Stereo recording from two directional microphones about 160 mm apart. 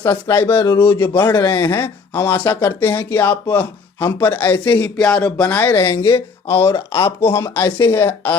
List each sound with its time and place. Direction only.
0.0 s speech: 15° left (ahead or behind)